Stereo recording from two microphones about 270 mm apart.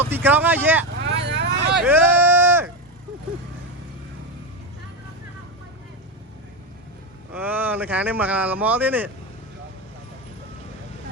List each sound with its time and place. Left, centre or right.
0.0 s speech: centre
1.0 s vehicle: right
1.7 s a sound: centre
7.3 s speech: centre